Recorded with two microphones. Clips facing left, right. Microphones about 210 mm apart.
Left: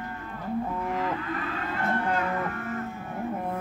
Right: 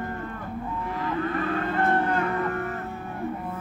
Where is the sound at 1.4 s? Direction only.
50° right (ahead or behind).